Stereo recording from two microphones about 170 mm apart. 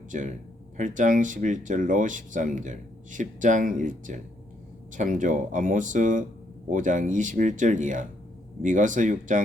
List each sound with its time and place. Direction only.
0.8 s speech: 50° right (ahead or behind)